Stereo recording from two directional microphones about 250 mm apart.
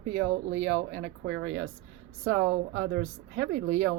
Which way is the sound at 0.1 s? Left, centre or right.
Right.